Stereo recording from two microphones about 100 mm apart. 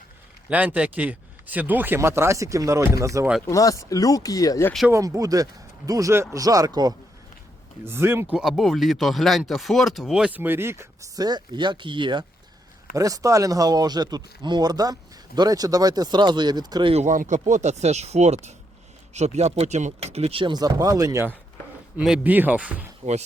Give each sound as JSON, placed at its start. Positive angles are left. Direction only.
{"t": 0.5, "sound": "speech", "side_deg": -15}
{"t": 3.4, "sound": "speech", "side_deg": 35}
{"t": 4.9, "sound": "speech", "side_deg": -30}
{"t": 7.9, "sound": "speech", "side_deg": -25}
{"t": 8.3, "sound": "speech", "side_deg": -5}
{"t": 10.3, "sound": "speech", "side_deg": -20}
{"t": 11.2, "sound": "speech", "side_deg": -45}
{"t": 12.9, "sound": "speech", "side_deg": -35}
{"t": 17.8, "sound": "speech", "side_deg": -90}
{"t": 19.4, "sound": "speech", "side_deg": -90}
{"t": 20.4, "sound": "speech", "side_deg": -45}
{"t": 21.9, "sound": "speech", "side_deg": -10}